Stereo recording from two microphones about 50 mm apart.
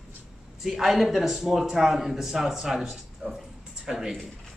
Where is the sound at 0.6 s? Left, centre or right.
Centre.